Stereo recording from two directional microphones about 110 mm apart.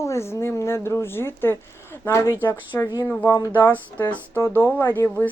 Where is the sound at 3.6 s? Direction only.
15° left (ahead or behind).